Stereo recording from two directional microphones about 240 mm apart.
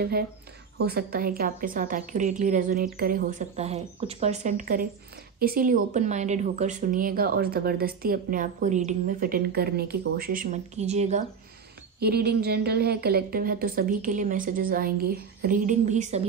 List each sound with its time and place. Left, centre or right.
0.7 s a woman's voice: right
12.0 s a woman's voice: right